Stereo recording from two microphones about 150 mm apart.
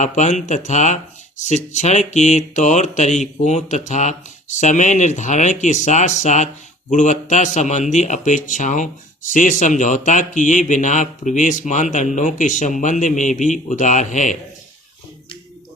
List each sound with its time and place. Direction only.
0.0 s speech: 55° left (ahead or behind)